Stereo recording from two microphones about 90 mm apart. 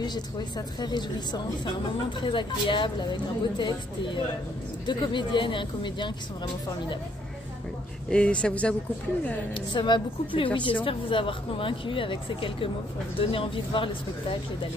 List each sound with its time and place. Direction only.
0.0 s a woman's voice: 55° left (ahead or behind)
8.1 s speech: 10° left (ahead or behind)
9.5 s a woman's voice: 60° left (ahead or behind); by 13.8 s 85° left